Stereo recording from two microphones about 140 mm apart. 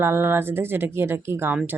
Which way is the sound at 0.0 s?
15° right (ahead or behind).